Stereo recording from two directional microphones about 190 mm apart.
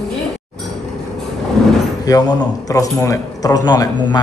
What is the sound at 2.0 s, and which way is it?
Speech, 20° left (ahead or behind).